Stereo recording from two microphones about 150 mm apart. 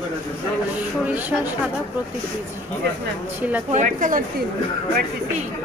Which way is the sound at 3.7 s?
60° right (ahead or behind).